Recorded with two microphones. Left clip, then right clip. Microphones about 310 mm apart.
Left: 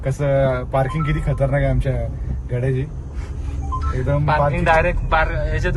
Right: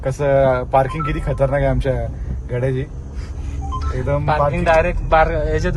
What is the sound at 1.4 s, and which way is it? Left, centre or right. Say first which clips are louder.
Speech: right 4 dB; right.